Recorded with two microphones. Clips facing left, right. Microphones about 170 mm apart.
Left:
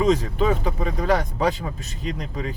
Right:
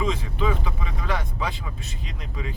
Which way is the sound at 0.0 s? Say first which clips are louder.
Left 6 dB; 40° left (ahead or behind).